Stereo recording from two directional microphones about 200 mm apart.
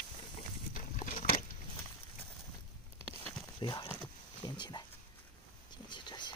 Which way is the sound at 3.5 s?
20° left (ahead or behind).